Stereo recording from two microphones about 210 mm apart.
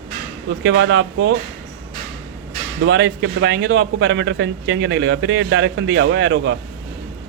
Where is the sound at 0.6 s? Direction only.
65° right (ahead or behind).